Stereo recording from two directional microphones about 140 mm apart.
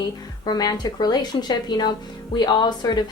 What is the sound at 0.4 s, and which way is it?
A woman's voice, 30° left (ahead or behind).